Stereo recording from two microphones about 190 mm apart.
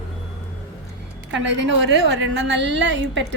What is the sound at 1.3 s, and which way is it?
A woman's voice, 70° right (ahead or behind).